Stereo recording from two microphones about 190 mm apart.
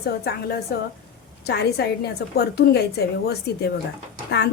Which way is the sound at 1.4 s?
60° left (ahead or behind).